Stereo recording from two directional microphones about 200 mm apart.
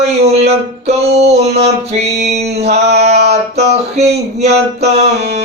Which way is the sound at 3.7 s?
35° right (ahead or behind).